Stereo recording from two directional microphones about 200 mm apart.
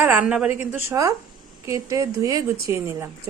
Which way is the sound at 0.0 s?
10° right (ahead or behind).